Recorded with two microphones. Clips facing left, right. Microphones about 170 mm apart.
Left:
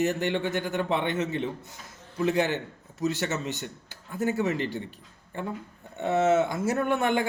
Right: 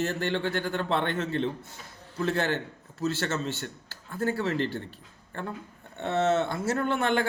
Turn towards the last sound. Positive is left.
turn(degrees=15)  # may be behind; listen again after turning